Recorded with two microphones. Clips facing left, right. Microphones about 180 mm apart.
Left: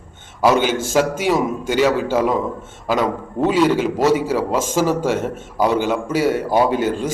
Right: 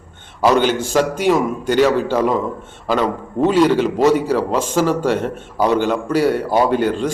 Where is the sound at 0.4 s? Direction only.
10° left (ahead or behind).